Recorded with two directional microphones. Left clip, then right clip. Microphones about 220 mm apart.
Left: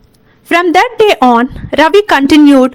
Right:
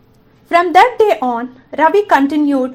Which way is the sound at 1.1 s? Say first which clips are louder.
Left 8 dB; 50° left (ahead or behind).